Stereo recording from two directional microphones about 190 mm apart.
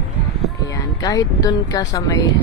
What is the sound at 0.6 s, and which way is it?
Speech, 20° left (ahead or behind).